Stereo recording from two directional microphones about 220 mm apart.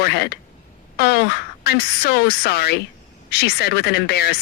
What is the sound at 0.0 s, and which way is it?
A woman's voice, 45° left (ahead or behind).